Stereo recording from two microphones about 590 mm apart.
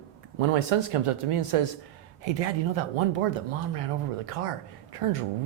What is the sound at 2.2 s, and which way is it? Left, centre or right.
Speech, right.